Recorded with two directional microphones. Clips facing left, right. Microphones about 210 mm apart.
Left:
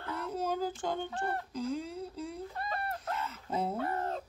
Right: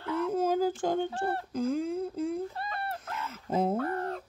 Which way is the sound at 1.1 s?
30° right (ahead or behind).